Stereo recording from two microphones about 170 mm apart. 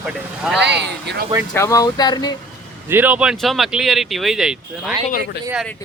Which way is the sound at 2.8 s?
10° right (ahead or behind).